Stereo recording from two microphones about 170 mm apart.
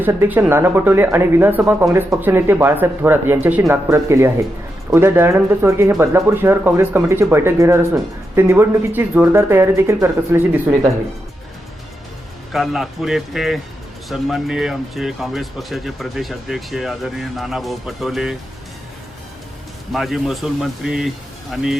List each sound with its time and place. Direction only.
0.0 s speech: 15° right (ahead or behind)
12.5 s speech: centre (ahead or behind)
19.9 s speech: centre (ahead or behind)